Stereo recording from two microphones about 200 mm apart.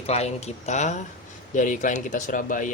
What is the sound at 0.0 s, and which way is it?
Speech, 30° left (ahead or behind).